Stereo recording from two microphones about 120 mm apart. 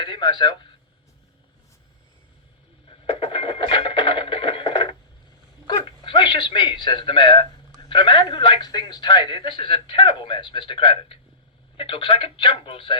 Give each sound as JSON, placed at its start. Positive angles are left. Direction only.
{"t": 0.0, "sound": "a sound", "side_deg": 40}
{"t": 2.8, "sound": "music", "side_deg": 45}
{"t": 5.6, "sound": "speech", "side_deg": 40}